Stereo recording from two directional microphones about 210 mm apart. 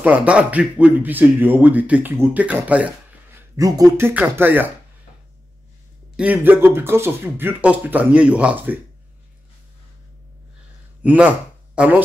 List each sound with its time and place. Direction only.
0.0 s speech: 5° right (ahead or behind)
3.3 s a sound: 15° right (ahead or behind)
3.9 s speech: 10° right (ahead or behind)
6.1 s speech: 5° right (ahead or behind)
11.0 s speech: 5° right (ahead or behind)